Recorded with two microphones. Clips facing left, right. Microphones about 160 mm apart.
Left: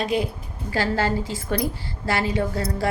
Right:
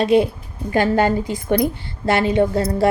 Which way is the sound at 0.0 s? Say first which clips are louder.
Right 9 dB; 25° right (ahead or behind).